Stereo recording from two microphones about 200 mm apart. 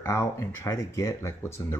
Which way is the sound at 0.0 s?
15° left (ahead or behind).